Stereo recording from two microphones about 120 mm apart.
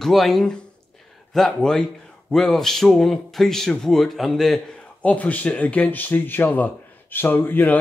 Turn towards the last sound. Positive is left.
turn(degrees=15)  # may be behind; listen again after turning